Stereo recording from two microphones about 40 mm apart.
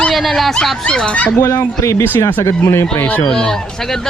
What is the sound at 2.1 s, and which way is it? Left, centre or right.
Speech, left.